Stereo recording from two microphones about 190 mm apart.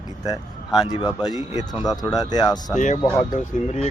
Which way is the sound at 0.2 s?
20° left (ahead or behind).